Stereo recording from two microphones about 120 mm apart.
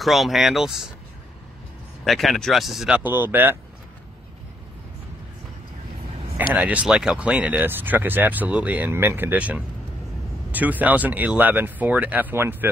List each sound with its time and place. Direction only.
0.0 s speech: centre (ahead or behind)
2.0 s speech: centre (ahead or behind)
3.0 s speech: 15° right (ahead or behind)
6.3 s speech: 10° right (ahead or behind)